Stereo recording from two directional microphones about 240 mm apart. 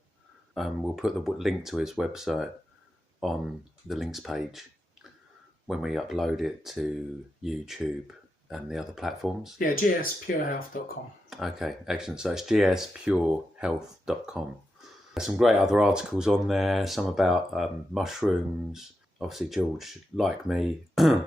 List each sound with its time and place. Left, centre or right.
0.5 s speech: centre
5.6 s speech: centre
9.6 s speech: left
11.3 s speech: centre